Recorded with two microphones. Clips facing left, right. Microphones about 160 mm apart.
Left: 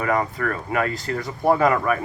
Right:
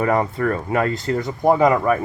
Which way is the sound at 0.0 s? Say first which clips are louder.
Right 4 dB; 30° right (ahead or behind).